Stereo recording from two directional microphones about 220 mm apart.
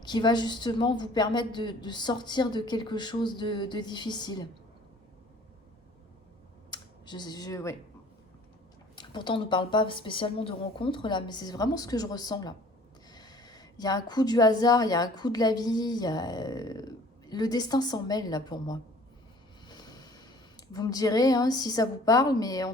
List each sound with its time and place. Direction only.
0.0 s a woman's voice: 20° left (ahead or behind)
6.7 s computer keyboard: 20° left (ahead or behind)
9.0 s a woman's voice: 20° left (ahead or behind)
19.6 s a sound: 20° left (ahead or behind)
20.7 s speech: 15° left (ahead or behind)